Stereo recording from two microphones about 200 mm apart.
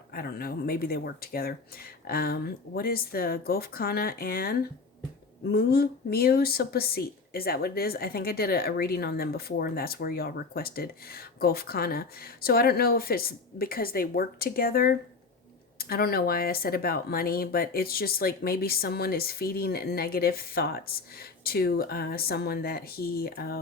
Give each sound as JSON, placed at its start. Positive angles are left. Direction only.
{"t": 0.1, "sound": "speech", "side_deg": 50}